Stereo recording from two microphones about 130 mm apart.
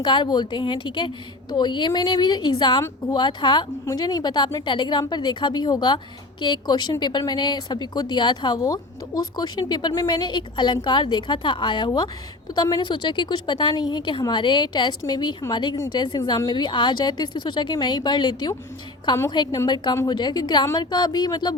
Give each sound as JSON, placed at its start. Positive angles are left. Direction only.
{"t": 0.0, "sound": "a woman's voice", "side_deg": 35}